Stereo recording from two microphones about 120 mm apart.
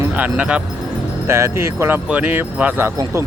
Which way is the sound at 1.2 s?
20° right (ahead or behind).